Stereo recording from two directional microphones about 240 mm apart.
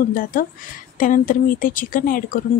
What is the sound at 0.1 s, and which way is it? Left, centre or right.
Speech, left.